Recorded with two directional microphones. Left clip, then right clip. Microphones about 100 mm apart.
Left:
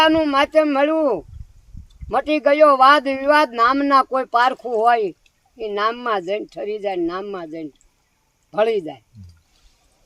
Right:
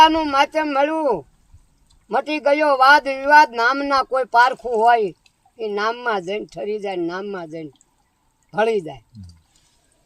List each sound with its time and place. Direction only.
0.0 s speech: 30° left (ahead or behind)